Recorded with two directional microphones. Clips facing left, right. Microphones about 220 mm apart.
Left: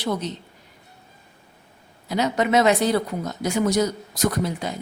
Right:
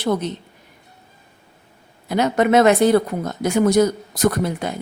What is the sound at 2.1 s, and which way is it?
A woman's voice, 55° right (ahead or behind).